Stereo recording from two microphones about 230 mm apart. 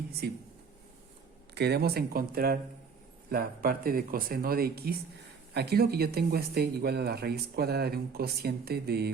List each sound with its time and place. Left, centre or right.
1.5 s speech: right